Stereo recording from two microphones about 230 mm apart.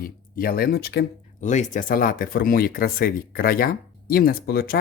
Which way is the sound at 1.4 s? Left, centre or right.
Left.